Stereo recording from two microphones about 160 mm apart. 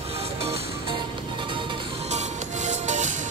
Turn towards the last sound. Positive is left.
turn(degrees=-45)  # may be behind; listen again after turning